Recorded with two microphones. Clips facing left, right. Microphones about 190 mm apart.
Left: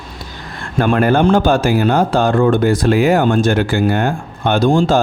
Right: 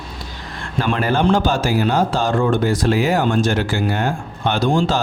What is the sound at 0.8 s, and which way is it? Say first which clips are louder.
Speech: left 5 dB; 55° left (ahead or behind).